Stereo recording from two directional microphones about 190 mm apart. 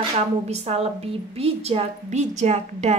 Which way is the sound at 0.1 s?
35° right (ahead or behind).